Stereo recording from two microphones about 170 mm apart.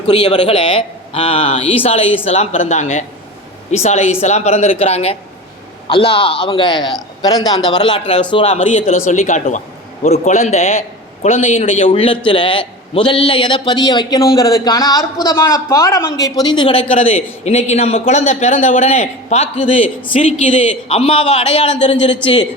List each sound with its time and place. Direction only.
0.1 s a man's voice: 30° left (ahead or behind)
8.5 s a man's voice: 40° left (ahead or behind)
22.2 s a man's voice: 30° left (ahead or behind)